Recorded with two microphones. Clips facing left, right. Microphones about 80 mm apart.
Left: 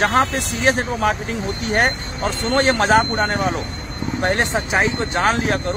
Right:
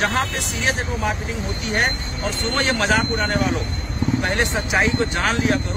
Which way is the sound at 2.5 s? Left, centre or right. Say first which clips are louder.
Left 5 dB; left.